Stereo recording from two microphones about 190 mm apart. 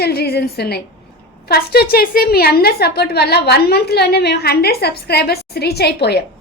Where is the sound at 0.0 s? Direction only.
55° left (ahead or behind).